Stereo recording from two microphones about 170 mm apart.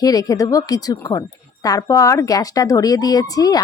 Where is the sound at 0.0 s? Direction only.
20° left (ahead or behind).